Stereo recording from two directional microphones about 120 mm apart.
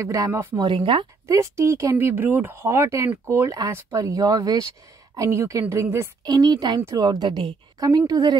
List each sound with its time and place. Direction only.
0.0 s speech: 25° right (ahead or behind)
0.6 s a woman's voice: 35° right (ahead or behind)
6.2 s a woman's voice: 35° right (ahead or behind)